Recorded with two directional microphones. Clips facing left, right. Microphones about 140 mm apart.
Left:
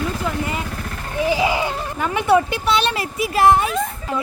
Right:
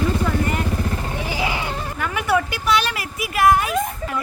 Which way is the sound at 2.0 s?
25° left (ahead or behind).